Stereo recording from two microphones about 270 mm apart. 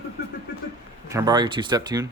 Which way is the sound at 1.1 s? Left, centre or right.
Centre.